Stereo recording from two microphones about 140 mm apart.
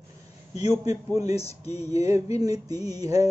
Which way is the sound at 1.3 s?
45° left (ahead or behind).